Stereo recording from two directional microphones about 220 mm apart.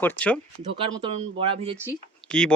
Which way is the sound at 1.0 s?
25° right (ahead or behind).